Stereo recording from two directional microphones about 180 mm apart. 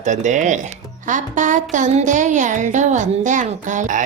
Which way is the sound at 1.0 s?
45° right (ahead or behind).